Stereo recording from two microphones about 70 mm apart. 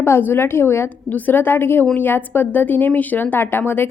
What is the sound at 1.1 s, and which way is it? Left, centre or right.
Speech, left.